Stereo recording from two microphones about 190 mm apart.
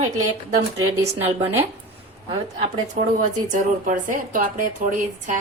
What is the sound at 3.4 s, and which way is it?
A woman's voice, 40° right (ahead or behind).